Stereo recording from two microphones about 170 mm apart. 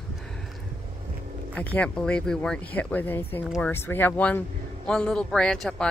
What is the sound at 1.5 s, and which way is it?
A woman's voice, 10° left (ahead or behind).